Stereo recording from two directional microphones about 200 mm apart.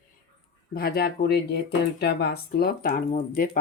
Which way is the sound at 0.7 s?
50° left (ahead or behind).